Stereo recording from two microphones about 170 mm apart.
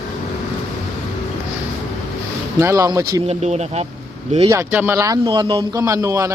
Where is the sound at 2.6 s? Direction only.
15° right (ahead or behind).